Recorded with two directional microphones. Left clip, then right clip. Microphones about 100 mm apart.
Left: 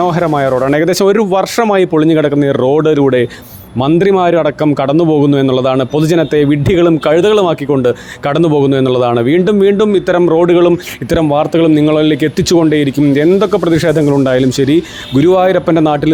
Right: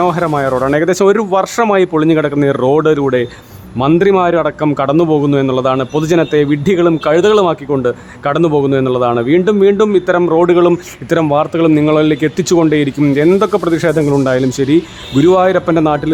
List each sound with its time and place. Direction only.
0.0 s speech: 25° left (ahead or behind)
14.0 s speech: centre (ahead or behind)
14.3 s speech: 35° left (ahead or behind)